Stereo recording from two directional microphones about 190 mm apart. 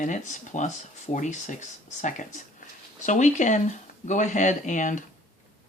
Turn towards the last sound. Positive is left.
turn(degrees=40)  # may be behind; listen again after turning